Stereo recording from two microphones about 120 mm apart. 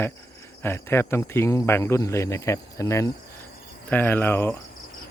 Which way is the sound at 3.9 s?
15° left (ahead or behind).